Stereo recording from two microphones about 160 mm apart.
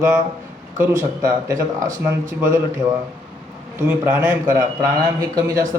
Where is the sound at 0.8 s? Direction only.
15° right (ahead or behind).